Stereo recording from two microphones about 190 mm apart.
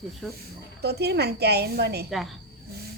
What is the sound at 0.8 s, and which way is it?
Speech, 60° right (ahead or behind).